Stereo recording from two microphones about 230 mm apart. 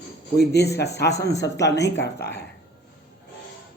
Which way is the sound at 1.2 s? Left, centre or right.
Centre.